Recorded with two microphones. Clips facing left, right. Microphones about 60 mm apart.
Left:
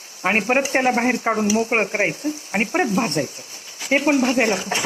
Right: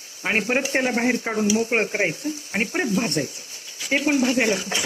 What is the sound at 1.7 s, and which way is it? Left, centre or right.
Speech, left.